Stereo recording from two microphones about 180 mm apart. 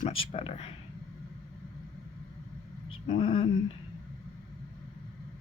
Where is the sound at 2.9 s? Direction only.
30° left (ahead or behind).